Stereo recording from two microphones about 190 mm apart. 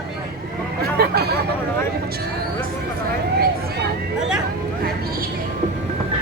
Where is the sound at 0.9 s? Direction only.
55° right (ahead or behind).